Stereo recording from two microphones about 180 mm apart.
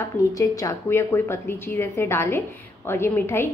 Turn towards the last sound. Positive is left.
turn(degrees=15)  # may be behind; listen again after turning